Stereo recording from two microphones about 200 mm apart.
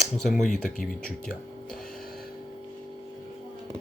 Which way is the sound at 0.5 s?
40° left (ahead or behind).